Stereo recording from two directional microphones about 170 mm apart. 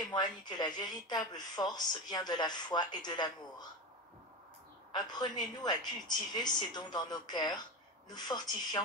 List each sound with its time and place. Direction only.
0.1 s speech: 25° left (ahead or behind)
4.9 s speech: 25° left (ahead or behind)